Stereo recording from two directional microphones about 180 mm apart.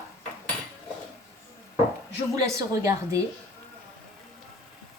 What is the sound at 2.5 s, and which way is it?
Speech, 15° right (ahead or behind).